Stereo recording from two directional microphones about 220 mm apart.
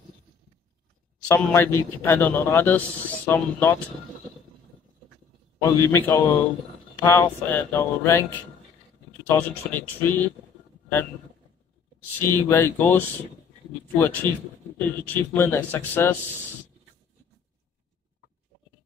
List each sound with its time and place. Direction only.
1.2 s speech: 10° left (ahead or behind)
5.6 s speech: 10° left (ahead or behind)
12.2 s speech: 10° left (ahead or behind)